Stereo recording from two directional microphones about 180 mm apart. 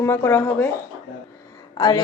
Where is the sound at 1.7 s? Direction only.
20° left (ahead or behind).